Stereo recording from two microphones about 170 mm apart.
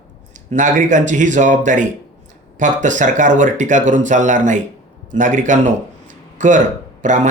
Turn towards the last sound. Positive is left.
turn(degrees=-45)  # may be behind; listen again after turning